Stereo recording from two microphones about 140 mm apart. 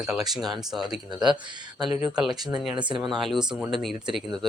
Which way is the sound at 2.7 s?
35° right (ahead or behind).